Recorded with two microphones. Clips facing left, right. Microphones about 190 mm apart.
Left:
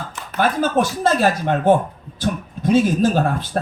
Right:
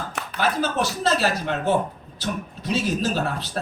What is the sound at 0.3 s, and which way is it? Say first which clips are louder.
Speech: left 6 dB; 50° left (ahead or behind).